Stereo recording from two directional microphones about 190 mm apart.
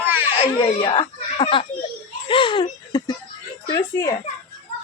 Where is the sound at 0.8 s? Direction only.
25° left (ahead or behind).